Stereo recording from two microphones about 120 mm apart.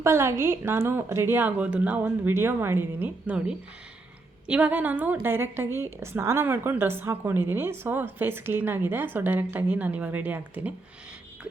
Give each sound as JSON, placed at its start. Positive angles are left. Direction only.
{"t": 0.0, "sound": "a woman's voice", "side_deg": -20}